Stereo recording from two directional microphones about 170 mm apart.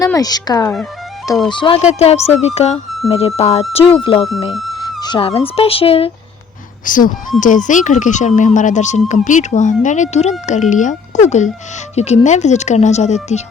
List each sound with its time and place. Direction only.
0.0 s speech: 20° left (ahead or behind)
1.8 s speech: 40° left (ahead or behind)
6.8 s speech: 50° left (ahead or behind)